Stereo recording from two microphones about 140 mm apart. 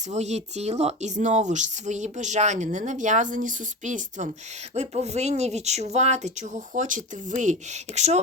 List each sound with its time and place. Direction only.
0.1 s speech: 55° right (ahead or behind)
4.7 s speech: 50° right (ahead or behind)